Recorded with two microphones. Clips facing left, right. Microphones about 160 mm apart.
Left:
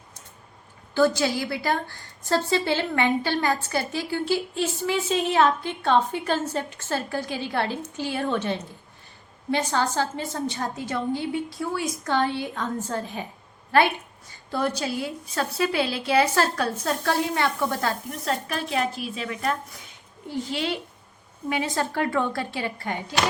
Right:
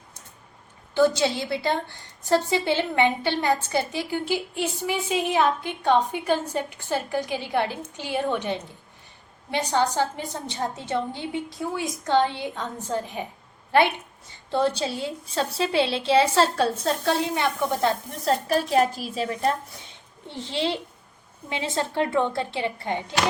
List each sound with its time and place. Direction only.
0.9 s a woman's voice: 20° right (ahead or behind)
14.5 s a woman's voice: 25° right (ahead or behind)
18.3 s a woman's voice: 35° right (ahead or behind)